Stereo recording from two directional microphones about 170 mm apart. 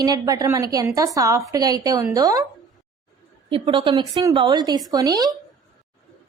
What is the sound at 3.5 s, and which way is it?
A woman's voice, 30° right (ahead or behind).